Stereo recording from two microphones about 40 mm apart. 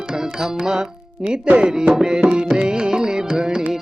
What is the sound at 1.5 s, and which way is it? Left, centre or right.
Music, right.